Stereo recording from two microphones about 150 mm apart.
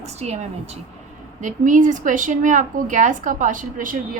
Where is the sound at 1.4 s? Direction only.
60° right (ahead or behind).